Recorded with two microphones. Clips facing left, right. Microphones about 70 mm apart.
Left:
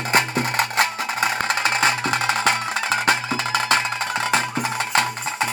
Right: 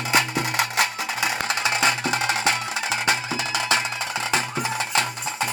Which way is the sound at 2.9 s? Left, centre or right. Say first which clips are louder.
Left 4 dB; left.